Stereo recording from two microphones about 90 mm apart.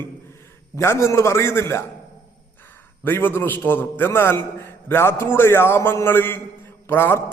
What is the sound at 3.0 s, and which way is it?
A man's voice, 25° left (ahead or behind).